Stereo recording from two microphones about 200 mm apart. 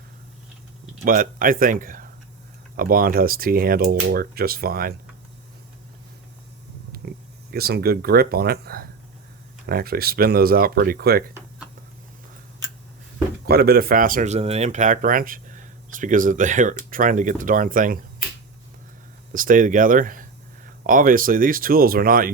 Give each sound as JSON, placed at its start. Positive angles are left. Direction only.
{"t": 1.0, "sound": "speech", "side_deg": -45}
{"t": 6.9, "sound": "a sound", "side_deg": -50}
{"t": 7.5, "sound": "speech", "side_deg": -50}
{"t": 13.4, "sound": "speech", "side_deg": -50}
{"t": 19.3, "sound": "speech", "side_deg": -45}